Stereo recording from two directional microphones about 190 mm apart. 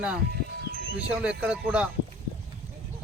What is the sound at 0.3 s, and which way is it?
Music, 55° right (ahead or behind).